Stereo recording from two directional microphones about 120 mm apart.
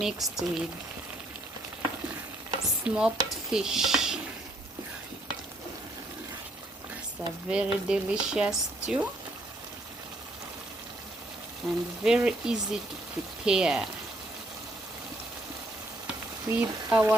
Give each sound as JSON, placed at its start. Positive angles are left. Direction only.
{"t": 0.0, "sound": "speech", "side_deg": -5}
{"t": 2.8, "sound": "frying", "side_deg": -5}
{"t": 3.5, "sound": "speech", "side_deg": -5}
{"t": 7.2, "sound": "frying", "side_deg": -5}
{"t": 11.6, "sound": "speech", "side_deg": 0}
{"t": 13.4, "sound": "frying", "side_deg": -5}
{"t": 16.0, "sound": "frying", "side_deg": -10}